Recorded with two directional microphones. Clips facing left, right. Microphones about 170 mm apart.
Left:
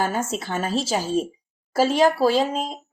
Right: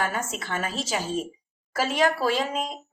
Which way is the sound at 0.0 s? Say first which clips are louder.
Left 4 dB; 30° left (ahead or behind).